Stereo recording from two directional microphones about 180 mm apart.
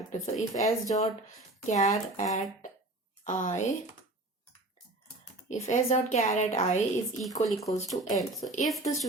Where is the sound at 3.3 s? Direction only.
45° left (ahead or behind).